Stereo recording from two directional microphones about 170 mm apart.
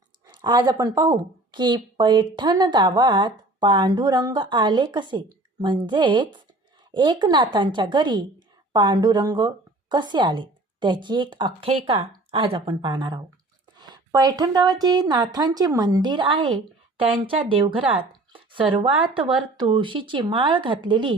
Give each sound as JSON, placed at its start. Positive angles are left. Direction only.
{"t": 0.3, "sound": "a woman's voice", "side_deg": -25}